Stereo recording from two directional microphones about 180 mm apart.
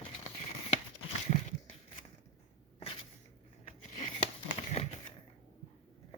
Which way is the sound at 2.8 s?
30° left (ahead or behind).